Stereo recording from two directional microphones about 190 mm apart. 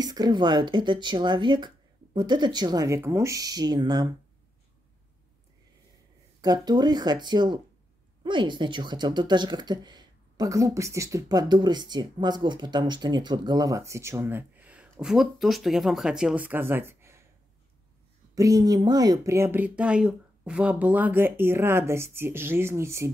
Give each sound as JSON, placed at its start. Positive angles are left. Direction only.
{"t": 0.0, "sound": "speech", "side_deg": -20}
{"t": 6.4, "sound": "speech", "side_deg": -20}
{"t": 18.3, "sound": "speech", "side_deg": -20}